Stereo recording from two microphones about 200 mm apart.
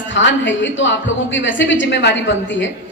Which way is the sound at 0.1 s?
65° left (ahead or behind).